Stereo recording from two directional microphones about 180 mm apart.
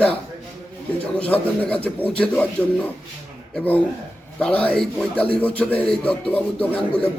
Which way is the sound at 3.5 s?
10° left (ahead or behind).